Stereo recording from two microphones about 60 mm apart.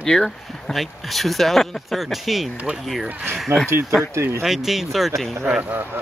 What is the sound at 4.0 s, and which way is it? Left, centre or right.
Speech, right.